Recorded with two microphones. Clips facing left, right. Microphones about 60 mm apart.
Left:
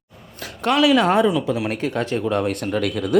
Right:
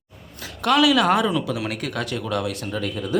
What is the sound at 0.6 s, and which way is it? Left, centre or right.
Speech, left.